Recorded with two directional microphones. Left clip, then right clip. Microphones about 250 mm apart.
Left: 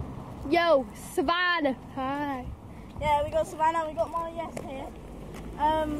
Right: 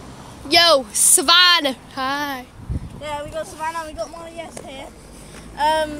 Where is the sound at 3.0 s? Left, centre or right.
Left.